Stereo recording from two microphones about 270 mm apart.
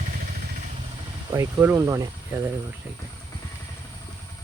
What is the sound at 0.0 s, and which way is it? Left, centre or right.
Vehicle, right.